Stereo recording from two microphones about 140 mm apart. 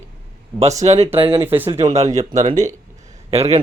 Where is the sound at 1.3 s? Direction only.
15° right (ahead or behind).